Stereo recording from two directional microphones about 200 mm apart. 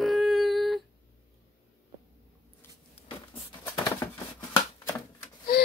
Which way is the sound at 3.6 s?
20° left (ahead or behind).